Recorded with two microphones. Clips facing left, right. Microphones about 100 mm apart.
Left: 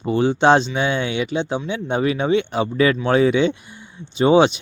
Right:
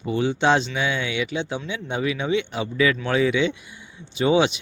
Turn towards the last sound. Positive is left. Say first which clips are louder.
# left 5 dB
turn(degrees=35)  # may be behind; listen again after turning